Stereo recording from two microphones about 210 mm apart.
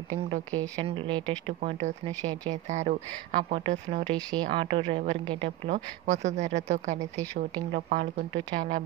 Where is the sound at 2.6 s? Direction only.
35° right (ahead or behind).